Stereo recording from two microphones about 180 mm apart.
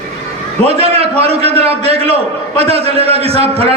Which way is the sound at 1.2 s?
35° right (ahead or behind).